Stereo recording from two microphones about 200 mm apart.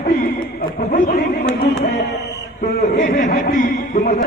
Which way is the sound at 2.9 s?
40° left (ahead or behind).